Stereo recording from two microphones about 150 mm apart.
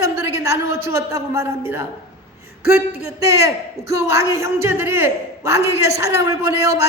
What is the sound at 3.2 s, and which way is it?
A man's voice, 20° right (ahead or behind).